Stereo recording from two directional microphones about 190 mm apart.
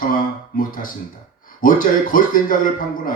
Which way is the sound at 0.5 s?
45° left (ahead or behind).